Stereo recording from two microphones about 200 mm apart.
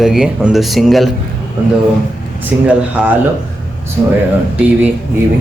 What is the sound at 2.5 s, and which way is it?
Speech, 10° right (ahead or behind).